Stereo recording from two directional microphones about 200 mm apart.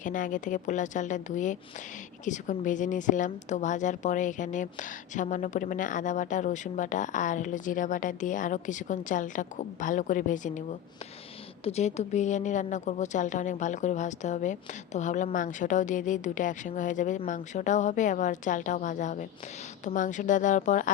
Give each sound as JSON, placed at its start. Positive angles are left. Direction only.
{"t": 0.0, "sound": "speech", "side_deg": 40}